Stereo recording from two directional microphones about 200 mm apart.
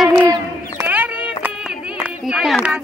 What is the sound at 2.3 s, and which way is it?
Speech, centre (ahead or behind).